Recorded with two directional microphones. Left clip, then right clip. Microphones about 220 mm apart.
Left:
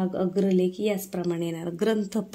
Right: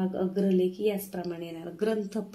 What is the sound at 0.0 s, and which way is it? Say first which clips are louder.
Speech: left 3 dB; 50° left (ahead or behind).